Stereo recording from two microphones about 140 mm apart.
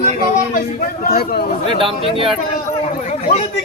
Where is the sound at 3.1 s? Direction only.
55° left (ahead or behind).